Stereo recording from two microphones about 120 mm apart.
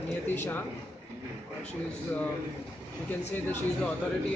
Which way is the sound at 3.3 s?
15° left (ahead or behind).